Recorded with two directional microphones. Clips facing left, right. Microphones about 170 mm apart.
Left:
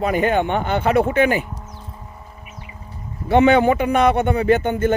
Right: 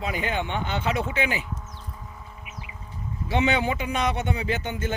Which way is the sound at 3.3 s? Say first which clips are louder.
Left 10 dB; 55° left (ahead or behind).